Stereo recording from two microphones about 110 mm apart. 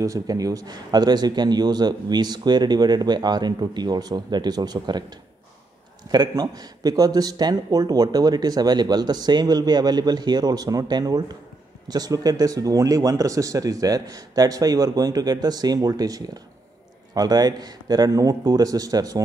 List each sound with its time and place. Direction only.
0.0 s speech: 30° right (ahead or behind)
6.1 s speech: 40° right (ahead or behind)